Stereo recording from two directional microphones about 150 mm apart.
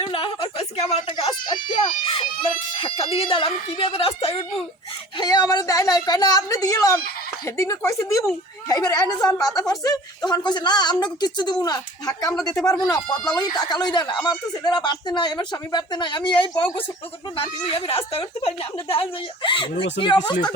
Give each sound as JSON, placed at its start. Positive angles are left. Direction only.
{"t": 0.0, "sound": "a sound", "side_deg": 35}
{"t": 1.2, "sound": "speech", "side_deg": 30}
{"t": 5.1, "sound": "speech", "side_deg": 30}